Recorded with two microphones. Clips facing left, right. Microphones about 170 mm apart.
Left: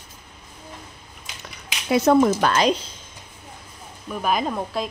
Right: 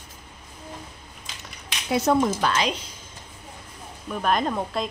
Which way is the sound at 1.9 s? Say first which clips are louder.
Left 5 dB; 65° left (ahead or behind).